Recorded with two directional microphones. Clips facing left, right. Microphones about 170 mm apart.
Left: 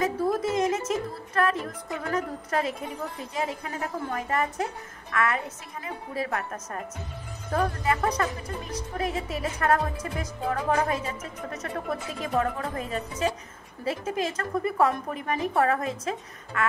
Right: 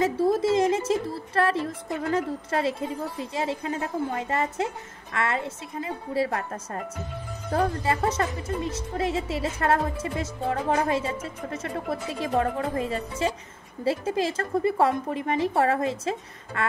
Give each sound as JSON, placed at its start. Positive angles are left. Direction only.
{"t": 0.0, "sound": "a woman's voice", "side_deg": -30}